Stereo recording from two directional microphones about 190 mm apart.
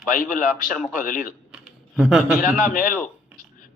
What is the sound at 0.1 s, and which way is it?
Speech, 45° left (ahead or behind).